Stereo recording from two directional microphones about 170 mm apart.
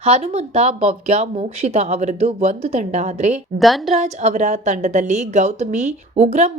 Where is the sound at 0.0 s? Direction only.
40° right (ahead or behind).